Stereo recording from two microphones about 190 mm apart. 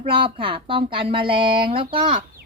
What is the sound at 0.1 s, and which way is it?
Speech, 25° right (ahead or behind).